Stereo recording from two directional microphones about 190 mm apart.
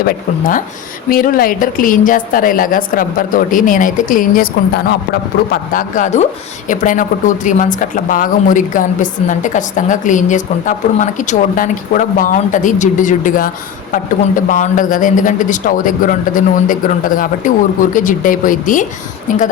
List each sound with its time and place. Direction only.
0.0 s speech: 45° left (ahead or behind)
5.5 s speech: 45° left (ahead or behind)